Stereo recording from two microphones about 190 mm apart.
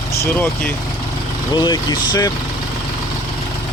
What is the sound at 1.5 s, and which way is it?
Speech, 20° left (ahead or behind).